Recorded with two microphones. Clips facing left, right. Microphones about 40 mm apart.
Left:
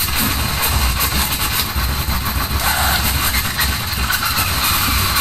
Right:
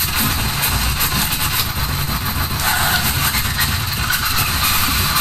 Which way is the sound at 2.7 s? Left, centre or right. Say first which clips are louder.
Right 1 dB; centre.